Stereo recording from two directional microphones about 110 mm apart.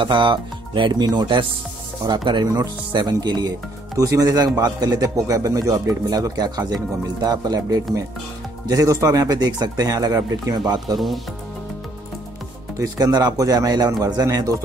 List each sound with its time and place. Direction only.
0.0 s speech: 45° right (ahead or behind)
12.7 s speech: 35° right (ahead or behind)